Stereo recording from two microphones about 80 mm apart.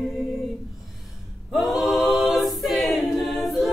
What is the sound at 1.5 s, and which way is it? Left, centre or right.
A capella, centre.